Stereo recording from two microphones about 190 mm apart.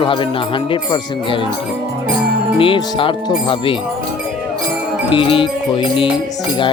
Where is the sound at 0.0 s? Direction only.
25° left (ahead or behind).